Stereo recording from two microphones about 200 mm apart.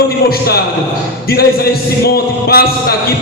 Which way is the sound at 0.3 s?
50° left (ahead or behind).